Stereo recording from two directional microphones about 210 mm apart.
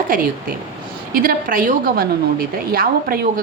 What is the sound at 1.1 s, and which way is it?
A woman's voice, 45° right (ahead or behind).